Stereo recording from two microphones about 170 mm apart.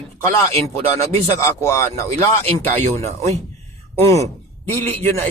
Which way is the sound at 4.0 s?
20° left (ahead or behind).